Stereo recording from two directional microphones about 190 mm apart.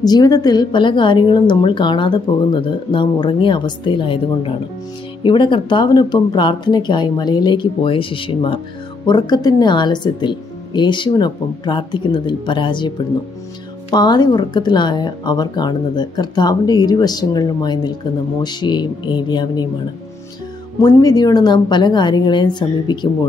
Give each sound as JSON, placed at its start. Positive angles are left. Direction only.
{"t": 0.0, "sound": "a woman's voice", "side_deg": 20}
{"t": 20.8, "sound": "a woman's voice", "side_deg": 20}